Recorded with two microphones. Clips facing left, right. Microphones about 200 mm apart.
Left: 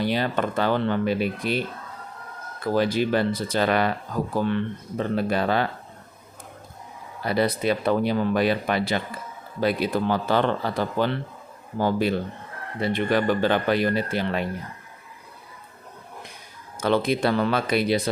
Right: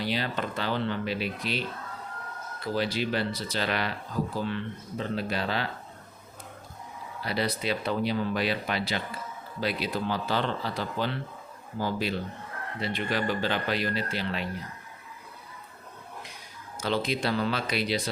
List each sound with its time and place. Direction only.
0.0 s speech: 55° left (ahead or behind)
2.6 s speech: 50° left (ahead or behind)
7.2 s speech: 50° left (ahead or behind)
16.8 s speech: 55° left (ahead or behind)